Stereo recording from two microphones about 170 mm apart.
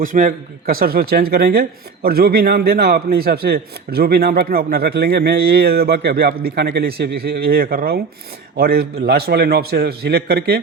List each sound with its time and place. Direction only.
0.0 s a man's voice: 50° right (ahead or behind); by 10.6 s 70° right (ahead or behind)